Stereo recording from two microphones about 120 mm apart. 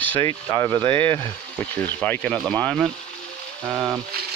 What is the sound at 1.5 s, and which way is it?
Speech, 10° left (ahead or behind).